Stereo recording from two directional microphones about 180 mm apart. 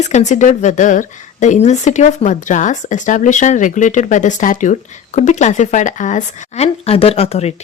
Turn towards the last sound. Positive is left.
turn(degrees=35)  # may be behind; listen again after turning